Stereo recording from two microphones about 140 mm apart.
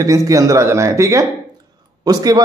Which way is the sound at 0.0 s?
25° right (ahead or behind).